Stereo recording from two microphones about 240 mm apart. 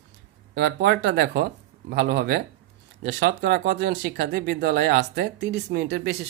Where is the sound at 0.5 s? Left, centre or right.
Right.